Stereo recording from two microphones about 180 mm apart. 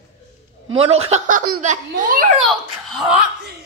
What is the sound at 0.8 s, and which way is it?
A woman's voice, 35° right (ahead or behind).